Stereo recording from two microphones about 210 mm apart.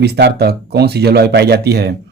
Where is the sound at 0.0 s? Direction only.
50° right (ahead or behind).